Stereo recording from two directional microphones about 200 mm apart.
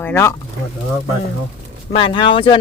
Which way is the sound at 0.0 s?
10° left (ahead or behind).